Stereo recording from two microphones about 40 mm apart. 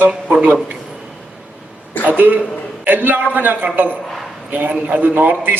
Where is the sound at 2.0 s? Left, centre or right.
Right.